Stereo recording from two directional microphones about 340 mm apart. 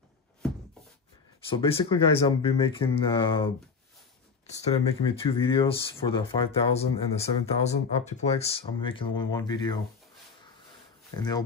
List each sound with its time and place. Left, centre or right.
1.5 s speech: centre
11.1 s speech: centre